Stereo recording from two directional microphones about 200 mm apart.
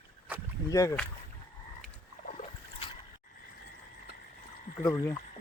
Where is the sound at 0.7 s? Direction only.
15° left (ahead or behind).